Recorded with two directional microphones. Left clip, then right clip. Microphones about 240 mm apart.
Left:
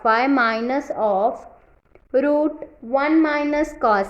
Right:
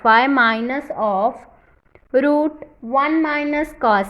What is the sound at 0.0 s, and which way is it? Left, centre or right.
A woman's voice, centre.